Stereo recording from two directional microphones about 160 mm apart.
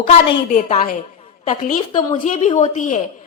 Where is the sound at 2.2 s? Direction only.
55° left (ahead or behind).